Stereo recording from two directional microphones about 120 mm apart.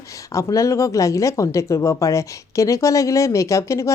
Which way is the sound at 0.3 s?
25° left (ahead or behind).